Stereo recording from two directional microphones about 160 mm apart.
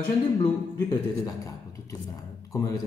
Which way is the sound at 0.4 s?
25° left (ahead or behind).